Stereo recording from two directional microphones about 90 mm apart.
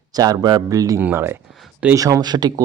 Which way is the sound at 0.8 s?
40° right (ahead or behind).